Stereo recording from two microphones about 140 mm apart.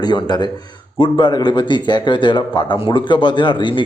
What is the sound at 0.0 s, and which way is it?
A man's voice, 30° left (ahead or behind).